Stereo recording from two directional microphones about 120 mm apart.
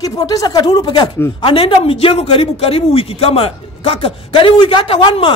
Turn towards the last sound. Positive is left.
turn(degrees=45)  # may be behind; listen again after turning